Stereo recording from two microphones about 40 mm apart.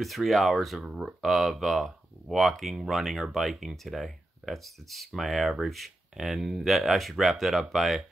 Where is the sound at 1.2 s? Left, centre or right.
Centre.